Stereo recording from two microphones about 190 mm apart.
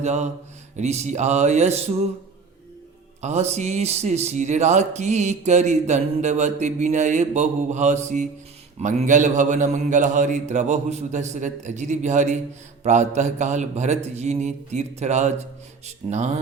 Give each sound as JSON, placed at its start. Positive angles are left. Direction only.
{"t": 0.0, "sound": "speech", "side_deg": -35}
{"t": 3.2, "sound": "speech", "side_deg": -35}